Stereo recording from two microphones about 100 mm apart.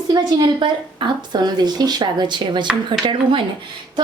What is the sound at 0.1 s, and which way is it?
A woman's voice, 50° right (ahead or behind).